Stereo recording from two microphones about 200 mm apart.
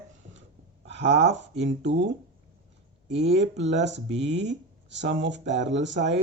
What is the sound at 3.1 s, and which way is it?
Speech, 60° right (ahead or behind).